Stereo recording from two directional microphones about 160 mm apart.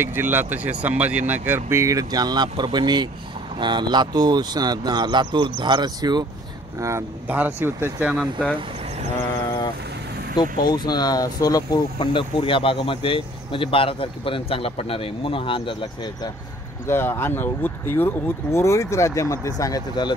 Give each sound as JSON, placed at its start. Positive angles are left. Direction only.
{"t": 0.0, "sound": "speech", "side_deg": -15}
{"t": 10.4, "sound": "speech", "side_deg": 25}
{"t": 16.8, "sound": "speech", "side_deg": 15}